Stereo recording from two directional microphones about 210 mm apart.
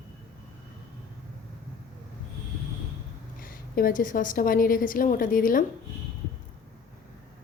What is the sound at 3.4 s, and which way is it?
A woman's voice, 40° left (ahead or behind).